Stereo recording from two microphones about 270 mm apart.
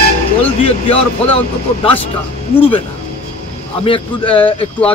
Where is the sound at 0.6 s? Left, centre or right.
Centre.